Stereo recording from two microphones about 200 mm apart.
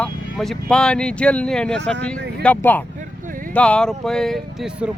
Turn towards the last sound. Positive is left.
turn(degrees=0)  # may be behind; listen again after turning